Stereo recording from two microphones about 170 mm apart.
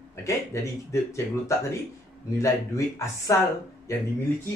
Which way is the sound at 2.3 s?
15° left (ahead or behind).